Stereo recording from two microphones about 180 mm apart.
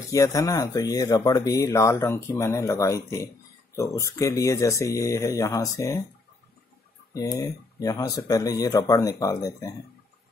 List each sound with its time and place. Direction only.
0.1 s speech: 20° left (ahead or behind)
7.2 s speech: 20° left (ahead or behind)